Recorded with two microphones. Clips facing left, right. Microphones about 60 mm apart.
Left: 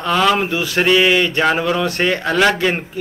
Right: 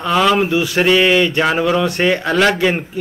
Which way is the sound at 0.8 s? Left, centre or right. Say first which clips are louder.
Right 1 dB; centre.